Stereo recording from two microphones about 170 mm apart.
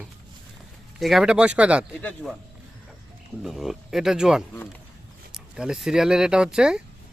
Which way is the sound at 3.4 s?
Centre (ahead or behind).